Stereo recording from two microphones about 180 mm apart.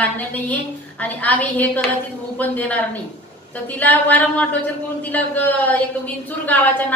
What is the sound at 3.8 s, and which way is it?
A woman's voice, 10° left (ahead or behind).